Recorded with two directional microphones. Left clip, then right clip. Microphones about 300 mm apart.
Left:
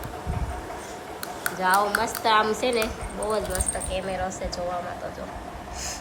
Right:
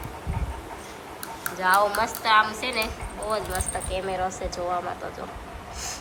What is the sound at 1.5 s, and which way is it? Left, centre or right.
Speech, centre.